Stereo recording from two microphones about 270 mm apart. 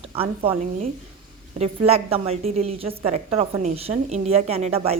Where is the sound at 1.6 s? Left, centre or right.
Right.